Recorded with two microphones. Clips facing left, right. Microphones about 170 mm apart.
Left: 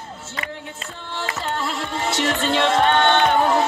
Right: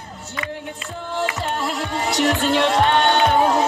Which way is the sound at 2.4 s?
20° left (ahead or behind).